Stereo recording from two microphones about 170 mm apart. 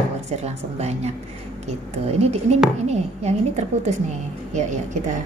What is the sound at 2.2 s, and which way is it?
Speech, 40° right (ahead or behind).